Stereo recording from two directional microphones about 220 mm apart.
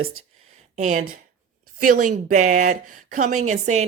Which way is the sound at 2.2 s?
35° right (ahead or behind).